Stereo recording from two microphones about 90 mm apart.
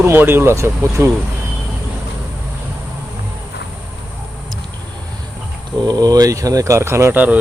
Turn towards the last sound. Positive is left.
turn(degrees=-20)  # may be behind; listen again after turning